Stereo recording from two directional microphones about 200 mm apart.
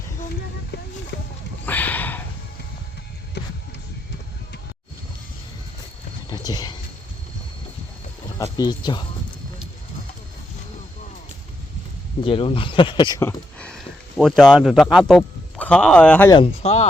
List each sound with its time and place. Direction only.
1.1 s a sound: 60° left (ahead or behind)
1.6 s a sound: 10° left (ahead or behind)
3.4 s music: 60° left (ahead or behind)
6.3 s horse: 20° left (ahead or behind)
8.5 s speech: 20° left (ahead or behind)
12.2 s speech: 25° left (ahead or behind); by 16.3 s 5° left (ahead or behind)
16.3 s speech: 30° left (ahead or behind)